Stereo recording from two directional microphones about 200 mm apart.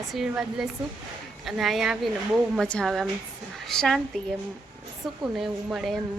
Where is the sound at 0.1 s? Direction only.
Centre (ahead or behind).